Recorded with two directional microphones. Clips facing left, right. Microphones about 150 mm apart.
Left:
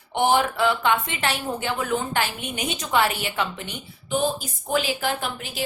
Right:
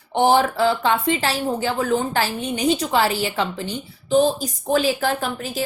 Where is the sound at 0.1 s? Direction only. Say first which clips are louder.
Right 4 dB; 35° right (ahead or behind).